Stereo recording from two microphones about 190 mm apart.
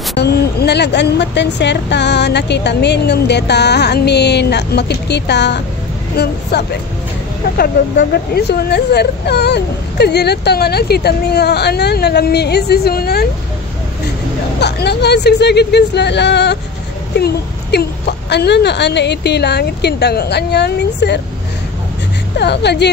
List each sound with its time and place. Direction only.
0.1 s speech: 60° left (ahead or behind)
7.5 s speech: 55° left (ahead or behind)
14.6 s speech: 60° left (ahead or behind)
17.2 s a sound: 60° left (ahead or behind)
18.3 s speech: 60° left (ahead or behind)
22.4 s speech: 60° left (ahead or behind)